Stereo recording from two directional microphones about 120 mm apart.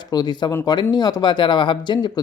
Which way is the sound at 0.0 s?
35° left (ahead or behind).